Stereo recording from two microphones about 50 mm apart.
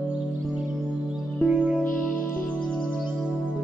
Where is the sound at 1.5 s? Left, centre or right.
Centre.